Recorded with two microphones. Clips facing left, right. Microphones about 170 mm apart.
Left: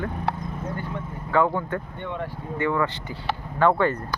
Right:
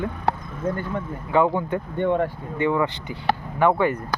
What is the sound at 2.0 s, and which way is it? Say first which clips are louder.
Speech: right 10 dB; 50° right (ahead or behind).